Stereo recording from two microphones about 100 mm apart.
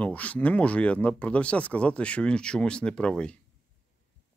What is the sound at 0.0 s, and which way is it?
Speech, 15° left (ahead or behind).